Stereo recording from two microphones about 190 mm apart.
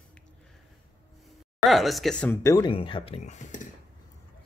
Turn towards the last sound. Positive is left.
turn(degrees=40)  # may be behind; listen again after turning